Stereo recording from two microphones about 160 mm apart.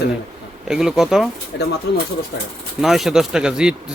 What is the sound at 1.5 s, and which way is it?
Speech, 90° left.